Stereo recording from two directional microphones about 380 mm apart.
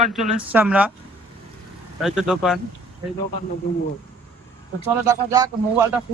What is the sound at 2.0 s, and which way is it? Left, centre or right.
Speech, centre.